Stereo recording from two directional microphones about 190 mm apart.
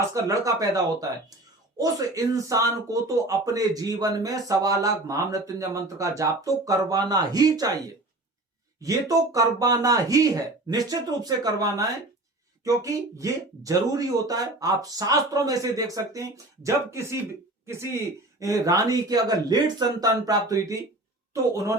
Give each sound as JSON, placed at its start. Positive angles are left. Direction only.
{"t": 0.0, "sound": "speech", "side_deg": -15}
{"t": 8.8, "sound": "speech", "side_deg": -20}